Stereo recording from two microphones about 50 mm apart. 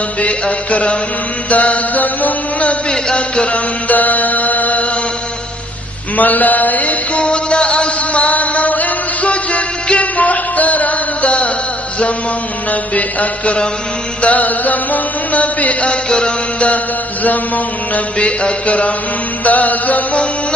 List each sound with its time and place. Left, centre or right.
0.2 s mantra: left
2.9 s music: centre
6.1 s music: left
12.9 s mantra: left
14.2 s chant: left
16.1 s music: centre
17.9 s mantra: left
19.4 s music: left